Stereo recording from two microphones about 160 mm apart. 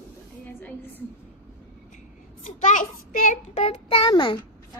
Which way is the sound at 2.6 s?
50° left (ahead or behind).